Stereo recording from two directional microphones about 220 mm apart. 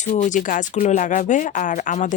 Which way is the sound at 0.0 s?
35° left (ahead or behind).